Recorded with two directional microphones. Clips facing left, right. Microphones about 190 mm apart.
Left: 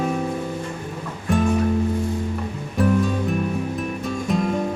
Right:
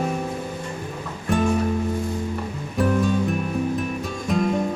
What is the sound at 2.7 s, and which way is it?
Music, centre (ahead or behind).